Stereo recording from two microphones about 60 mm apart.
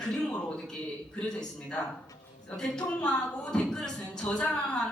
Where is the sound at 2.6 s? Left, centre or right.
Centre.